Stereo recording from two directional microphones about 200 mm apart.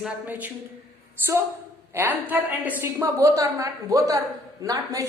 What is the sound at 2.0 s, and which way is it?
A woman's voice, 10° right (ahead or behind).